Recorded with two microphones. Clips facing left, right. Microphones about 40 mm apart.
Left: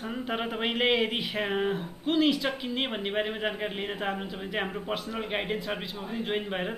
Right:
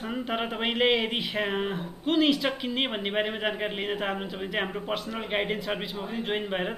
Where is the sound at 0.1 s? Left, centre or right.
Centre.